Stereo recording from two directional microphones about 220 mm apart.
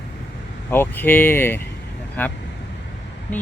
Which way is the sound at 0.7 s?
10° left (ahead or behind).